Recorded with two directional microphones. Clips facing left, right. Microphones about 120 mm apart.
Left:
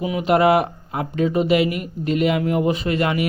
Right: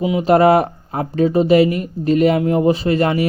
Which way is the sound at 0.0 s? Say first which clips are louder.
Right 5 dB; 25° right (ahead or behind).